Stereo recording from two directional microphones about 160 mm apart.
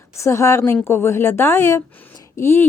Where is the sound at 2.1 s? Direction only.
20° left (ahead or behind).